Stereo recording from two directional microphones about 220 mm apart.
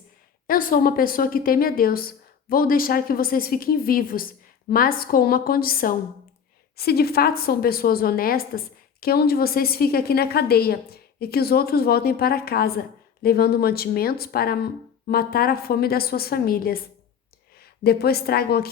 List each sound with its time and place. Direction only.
0.4 s a woman's voice: 40° left (ahead or behind)